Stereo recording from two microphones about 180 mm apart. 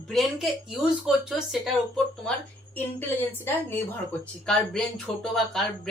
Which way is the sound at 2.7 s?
10° left (ahead or behind).